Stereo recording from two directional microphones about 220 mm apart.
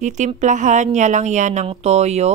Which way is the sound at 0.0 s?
35° right (ahead or behind).